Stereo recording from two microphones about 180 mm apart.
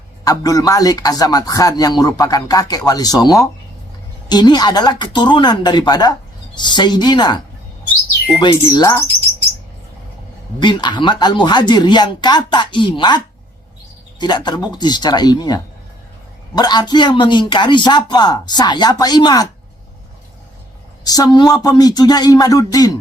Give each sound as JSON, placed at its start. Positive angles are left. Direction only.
{"t": 0.3, "sound": "a man's voice", "side_deg": 20}
{"t": 8.4, "sound": "a man's voice", "side_deg": 25}
{"t": 10.6, "sound": "a man's voice", "side_deg": 25}
{"t": 21.0, "sound": "a man's voice", "side_deg": 20}